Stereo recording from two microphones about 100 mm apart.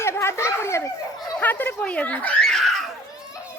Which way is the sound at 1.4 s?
20° left (ahead or behind).